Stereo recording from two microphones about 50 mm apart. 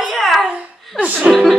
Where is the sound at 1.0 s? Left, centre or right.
Centre.